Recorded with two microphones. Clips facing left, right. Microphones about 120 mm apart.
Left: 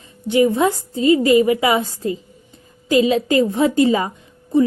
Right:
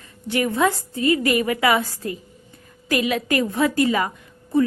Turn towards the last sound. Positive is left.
turn(degrees=20)  # may be behind; listen again after turning